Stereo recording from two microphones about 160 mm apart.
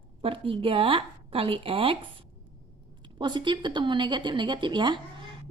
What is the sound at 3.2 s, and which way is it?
A woman's voice, 30° right (ahead or behind).